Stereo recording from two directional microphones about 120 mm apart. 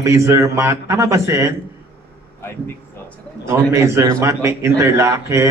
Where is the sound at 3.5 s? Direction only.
25° right (ahead or behind).